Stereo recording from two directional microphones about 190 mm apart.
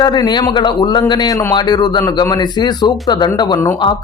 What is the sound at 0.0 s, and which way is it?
A man's voice, 20° left (ahead or behind).